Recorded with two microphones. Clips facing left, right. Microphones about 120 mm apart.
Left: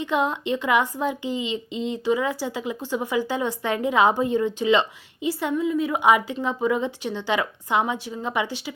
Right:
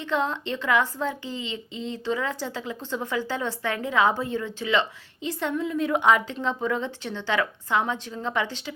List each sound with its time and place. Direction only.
0.0 s speech: 15° left (ahead or behind)
5.3 s speech: 10° left (ahead or behind)